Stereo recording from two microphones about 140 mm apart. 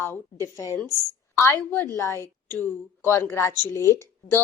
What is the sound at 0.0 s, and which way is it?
A woman's voice, 20° left (ahead or behind).